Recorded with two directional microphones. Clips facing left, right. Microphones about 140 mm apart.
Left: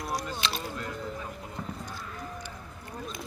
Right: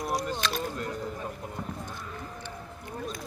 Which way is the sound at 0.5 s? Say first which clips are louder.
Right 3 dB; 45° right (ahead or behind).